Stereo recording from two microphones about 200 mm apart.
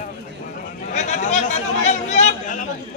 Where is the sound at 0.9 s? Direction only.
35° left (ahead or behind).